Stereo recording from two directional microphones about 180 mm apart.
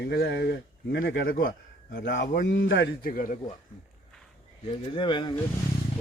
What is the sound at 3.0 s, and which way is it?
Speech, 50° left (ahead or behind).